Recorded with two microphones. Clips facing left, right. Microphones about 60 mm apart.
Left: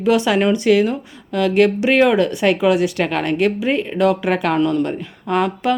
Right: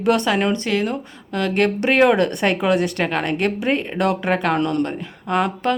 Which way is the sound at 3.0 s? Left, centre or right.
Centre.